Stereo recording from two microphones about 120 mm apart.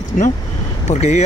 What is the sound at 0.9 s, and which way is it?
Speech, 70° left (ahead or behind).